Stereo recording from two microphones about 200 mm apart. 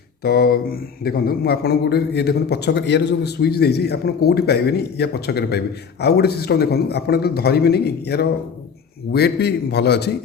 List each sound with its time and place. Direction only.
0.2 s a man's voice: 50° left (ahead or behind)